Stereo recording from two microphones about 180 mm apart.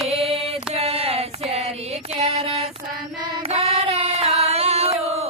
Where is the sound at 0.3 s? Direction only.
35° right (ahead or behind).